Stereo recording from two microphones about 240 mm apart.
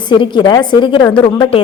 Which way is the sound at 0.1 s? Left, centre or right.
Centre.